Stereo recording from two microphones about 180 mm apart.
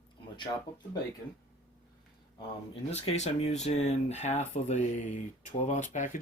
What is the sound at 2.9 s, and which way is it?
Speech, 35° left (ahead or behind).